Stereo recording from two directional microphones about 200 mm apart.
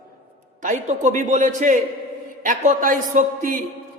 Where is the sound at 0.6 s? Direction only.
40° right (ahead or behind).